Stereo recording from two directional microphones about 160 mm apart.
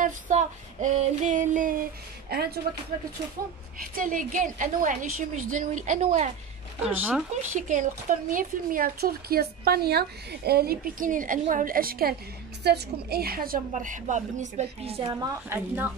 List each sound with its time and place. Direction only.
0.0 s female singing: 45° right (ahead or behind); by 2.6 s 80° right
3.8 s speech: 60° right (ahead or behind)
6.8 s a woman's voice: 10° right (ahead or behind)
7.5 s speech: 55° right (ahead or behind)
12.6 s female singing: 85° right; by 15.0 s 40° right (ahead or behind)
15.0 s a woman's voice: 20° right (ahead or behind)